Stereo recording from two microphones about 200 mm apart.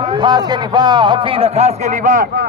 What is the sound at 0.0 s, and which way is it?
A man's voice, 25° right (ahead or behind).